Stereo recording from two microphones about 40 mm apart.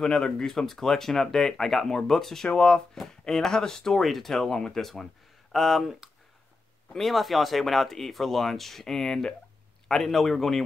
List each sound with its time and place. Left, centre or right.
0.0 s speech: centre
2.5 s speech: left
3.0 s speech: centre
5.5 s speech: centre